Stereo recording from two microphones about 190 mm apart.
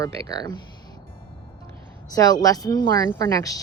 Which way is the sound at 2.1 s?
20° left (ahead or behind).